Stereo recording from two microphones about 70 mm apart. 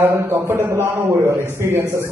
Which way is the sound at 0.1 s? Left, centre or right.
Right.